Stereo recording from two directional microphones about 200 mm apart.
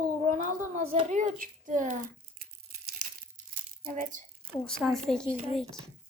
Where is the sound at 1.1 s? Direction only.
40° right (ahead or behind).